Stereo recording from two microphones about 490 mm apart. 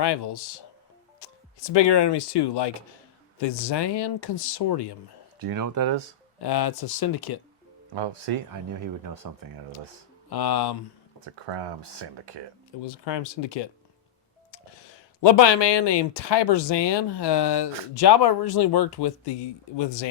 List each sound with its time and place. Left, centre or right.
0.0 s speech: left
5.4 s speech: right
6.4 s speech: left
7.9 s speech: right
8.8 s speech: right
10.2 s speech: left
11.4 s speech: right
12.8 s speech: left
15.2 s speech: left